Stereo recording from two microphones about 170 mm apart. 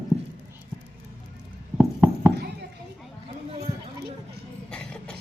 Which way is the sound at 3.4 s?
35° right (ahead or behind).